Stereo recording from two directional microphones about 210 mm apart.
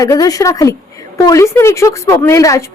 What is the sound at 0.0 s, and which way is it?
A woman's voice, 15° left (ahead or behind).